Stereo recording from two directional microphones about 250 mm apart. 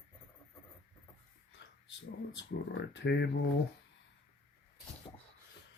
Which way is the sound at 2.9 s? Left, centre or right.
Left.